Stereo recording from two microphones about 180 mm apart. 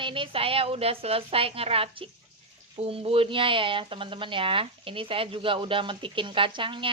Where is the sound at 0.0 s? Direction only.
30° right (ahead or behind).